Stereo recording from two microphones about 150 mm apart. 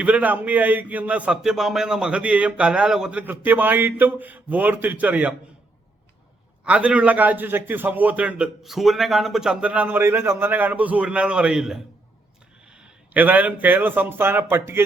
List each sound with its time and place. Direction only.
0.0 s a man's voice: 10° right (ahead or behind)
6.7 s a man's voice: 10° right (ahead or behind)